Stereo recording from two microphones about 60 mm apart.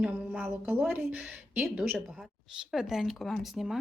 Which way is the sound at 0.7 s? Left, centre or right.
Right.